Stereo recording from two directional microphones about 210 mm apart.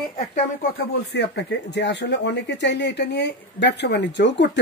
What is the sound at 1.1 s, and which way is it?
Speech, 55° left (ahead or behind).